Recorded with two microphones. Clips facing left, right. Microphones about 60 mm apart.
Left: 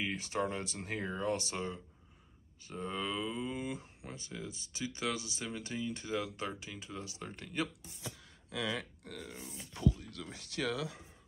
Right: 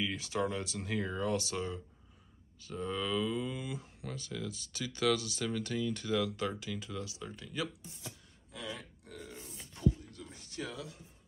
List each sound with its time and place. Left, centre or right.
0.0 s speech: left
3.5 s speech: left
3.8 s speech: left
7.1 s speech: left
8.5 s speech: left
9.0 s speech: left
9.8 s speech: left